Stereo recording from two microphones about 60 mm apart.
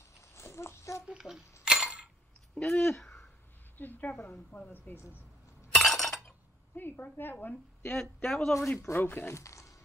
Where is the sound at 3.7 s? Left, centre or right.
Left.